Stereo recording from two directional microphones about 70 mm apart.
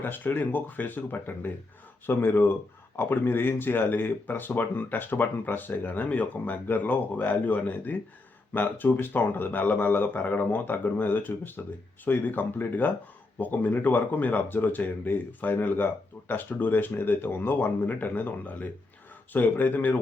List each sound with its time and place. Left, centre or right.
0.0 s speech: left